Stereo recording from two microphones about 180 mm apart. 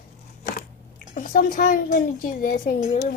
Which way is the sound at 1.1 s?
50° left (ahead or behind).